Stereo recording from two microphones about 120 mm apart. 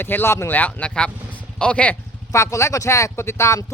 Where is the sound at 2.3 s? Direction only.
25° left (ahead or behind).